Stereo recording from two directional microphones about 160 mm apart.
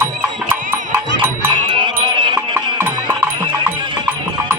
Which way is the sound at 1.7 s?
30° right (ahead or behind).